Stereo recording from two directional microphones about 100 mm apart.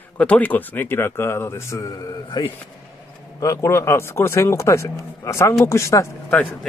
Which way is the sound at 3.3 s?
30° left (ahead or behind).